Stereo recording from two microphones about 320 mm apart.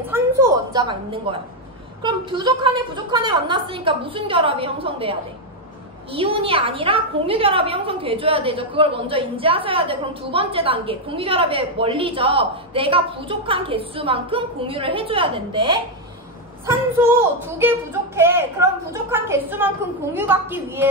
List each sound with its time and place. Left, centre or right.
0.1 s a sound: centre
2.0 s a woman's voice: centre
6.1 s a woman's voice: centre